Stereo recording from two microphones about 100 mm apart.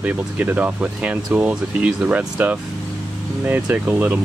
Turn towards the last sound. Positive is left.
turn(degrees=-15)  # may be behind; listen again after turning